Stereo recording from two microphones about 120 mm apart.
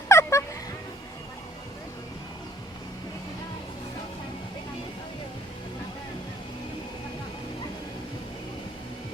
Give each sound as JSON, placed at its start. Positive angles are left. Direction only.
{"t": 0.1, "sound": "fowl", "side_deg": 25}